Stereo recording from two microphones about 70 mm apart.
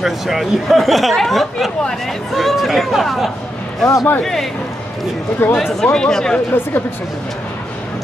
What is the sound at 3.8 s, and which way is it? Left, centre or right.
Speech, left.